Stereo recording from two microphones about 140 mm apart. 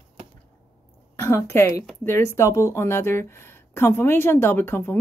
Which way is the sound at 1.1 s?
20° left (ahead or behind).